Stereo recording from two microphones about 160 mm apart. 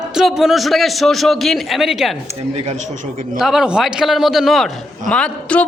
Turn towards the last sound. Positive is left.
turn(degrees=5)  # may be behind; listen again after turning